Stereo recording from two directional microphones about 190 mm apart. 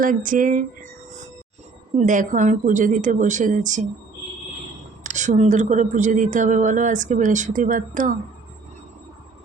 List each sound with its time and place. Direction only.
0.0 s speech: 45° right (ahead or behind)
5.0 s speech: 40° right (ahead or behind)